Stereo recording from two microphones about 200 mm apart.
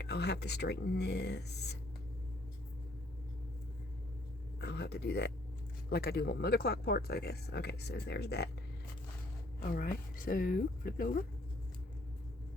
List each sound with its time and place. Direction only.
0.0 s speech: 55° left (ahead or behind)
4.6 s speech: 60° left (ahead or behind)
9.6 s speech: 45° left (ahead or behind)